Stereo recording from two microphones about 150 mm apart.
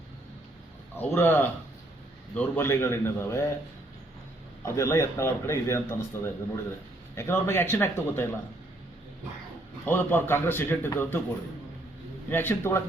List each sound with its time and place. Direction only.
0.9 s a man's voice: 15° left (ahead or behind)
4.6 s a man's voice: 20° left (ahead or behind)
9.8 s a man's voice: 10° left (ahead or behind)
12.3 s a man's voice: 15° left (ahead or behind)